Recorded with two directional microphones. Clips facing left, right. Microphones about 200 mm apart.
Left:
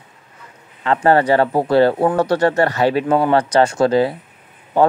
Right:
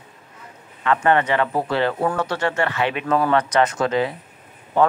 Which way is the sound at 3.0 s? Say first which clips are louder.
Left 4 dB; 25° left (ahead or behind).